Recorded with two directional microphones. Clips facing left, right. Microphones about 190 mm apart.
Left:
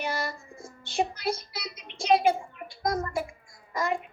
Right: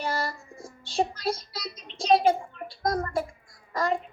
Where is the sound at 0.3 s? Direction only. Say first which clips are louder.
Right 1 dB; 35° right (ahead or behind).